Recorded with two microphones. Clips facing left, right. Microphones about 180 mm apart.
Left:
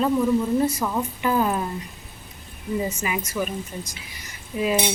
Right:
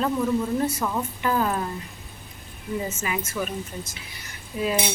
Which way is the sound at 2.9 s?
15° left (ahead or behind).